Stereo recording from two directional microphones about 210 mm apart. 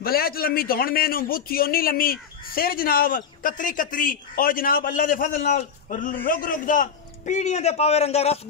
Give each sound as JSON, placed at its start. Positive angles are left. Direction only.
{"t": 0.0, "sound": "a man's voice", "side_deg": 45}